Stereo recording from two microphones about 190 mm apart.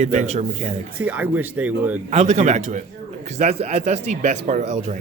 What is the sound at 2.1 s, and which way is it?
Speech, 35° right (ahead or behind).